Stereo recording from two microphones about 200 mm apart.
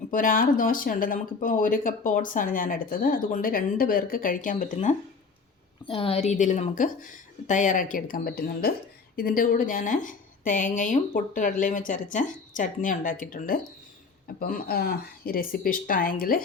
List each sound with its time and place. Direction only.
0.1 s speech: 45° left (ahead or behind)